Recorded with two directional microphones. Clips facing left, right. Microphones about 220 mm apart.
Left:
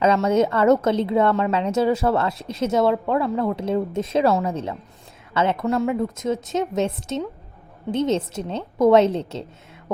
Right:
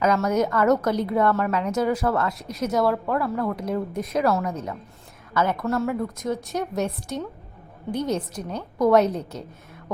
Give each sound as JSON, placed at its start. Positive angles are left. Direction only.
{"t": 0.0, "sound": "a woman's voice", "side_deg": 30}
{"t": 2.3, "sound": "speech", "side_deg": 0}
{"t": 2.6, "sound": "a woman's voice", "side_deg": 25}